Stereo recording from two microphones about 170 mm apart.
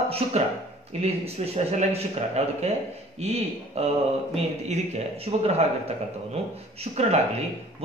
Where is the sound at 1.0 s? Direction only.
40° right (ahead or behind).